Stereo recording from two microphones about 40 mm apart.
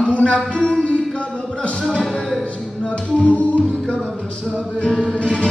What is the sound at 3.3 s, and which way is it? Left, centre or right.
Music, left.